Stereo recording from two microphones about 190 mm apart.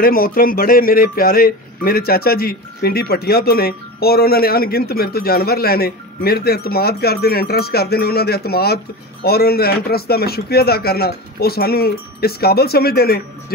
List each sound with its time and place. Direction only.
0.0 s a man's voice: 50° left (ahead or behind)